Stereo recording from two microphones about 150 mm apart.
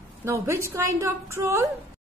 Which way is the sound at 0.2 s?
20° right (ahead or behind).